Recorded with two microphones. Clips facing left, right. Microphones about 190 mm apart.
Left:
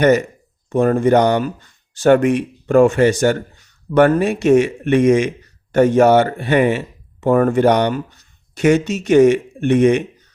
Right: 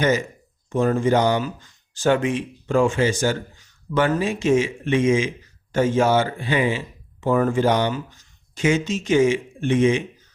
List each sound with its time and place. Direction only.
0.0 s speech: 65° left (ahead or behind)